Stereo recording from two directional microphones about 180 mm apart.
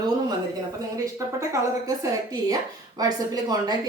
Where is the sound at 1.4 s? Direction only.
15° right (ahead or behind).